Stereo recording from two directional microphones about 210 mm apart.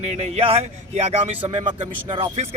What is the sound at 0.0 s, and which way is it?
Speech, 30° right (ahead or behind).